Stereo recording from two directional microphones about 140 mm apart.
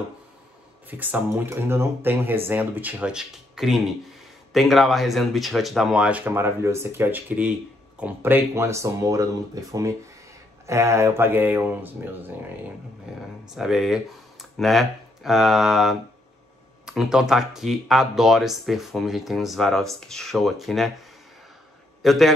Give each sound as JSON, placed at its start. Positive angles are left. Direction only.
{"t": 0.8, "sound": "speech", "side_deg": -15}
{"t": 22.0, "sound": "a man's voice", "side_deg": 0}